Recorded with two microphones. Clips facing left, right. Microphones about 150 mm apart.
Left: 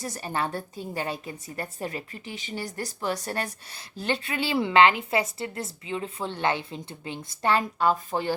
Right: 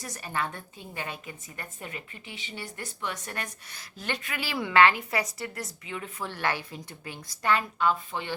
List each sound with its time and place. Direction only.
0.0 s a woman's voice: 30° left (ahead or behind)